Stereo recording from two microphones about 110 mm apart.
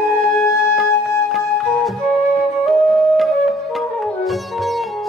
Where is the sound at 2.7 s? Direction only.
Centre (ahead or behind).